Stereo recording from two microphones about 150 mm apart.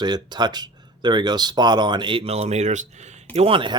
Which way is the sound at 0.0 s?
30° right (ahead or behind).